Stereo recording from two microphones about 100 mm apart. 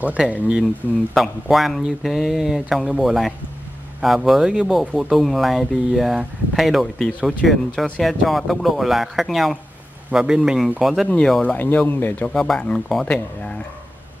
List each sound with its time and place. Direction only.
0.0 s speech: 15° right (ahead or behind)
1.1 s speech: centre (ahead or behind)
11.4 s speech: 20° left (ahead or behind)
12.3 s speech: 5° left (ahead or behind)